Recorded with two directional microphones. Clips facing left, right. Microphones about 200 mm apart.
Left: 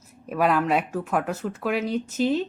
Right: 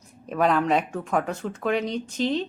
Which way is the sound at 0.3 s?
5° left (ahead or behind).